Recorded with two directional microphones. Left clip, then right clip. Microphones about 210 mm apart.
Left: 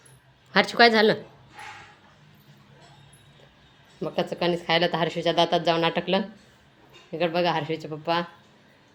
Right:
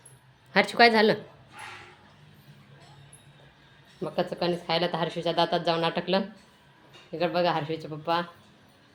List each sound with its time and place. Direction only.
0.5 s a woman's voice: 5° left (ahead or behind)
4.0 s a woman's voice: 15° left (ahead or behind)